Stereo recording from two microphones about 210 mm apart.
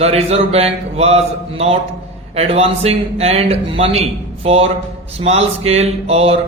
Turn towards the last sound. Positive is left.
turn(degrees=-30)  # may be behind; listen again after turning